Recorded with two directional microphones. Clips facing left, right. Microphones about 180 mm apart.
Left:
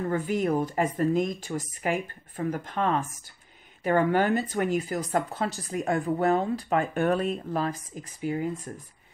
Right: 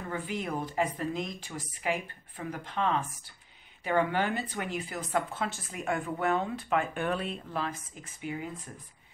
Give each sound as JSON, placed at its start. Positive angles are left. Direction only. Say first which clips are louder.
{"t": 0.1, "sound": "speech", "louder": "left 7 dB", "side_deg": 45}